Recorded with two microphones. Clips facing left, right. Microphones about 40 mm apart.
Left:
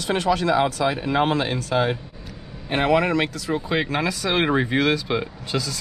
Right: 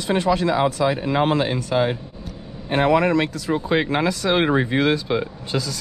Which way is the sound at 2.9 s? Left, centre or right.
Left.